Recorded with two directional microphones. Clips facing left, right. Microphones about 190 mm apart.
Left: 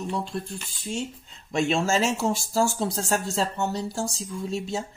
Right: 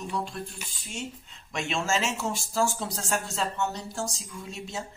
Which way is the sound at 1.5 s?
35° left (ahead or behind).